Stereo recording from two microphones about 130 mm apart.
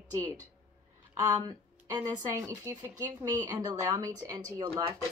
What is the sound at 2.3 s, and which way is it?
A woman's voice, 20° right (ahead or behind).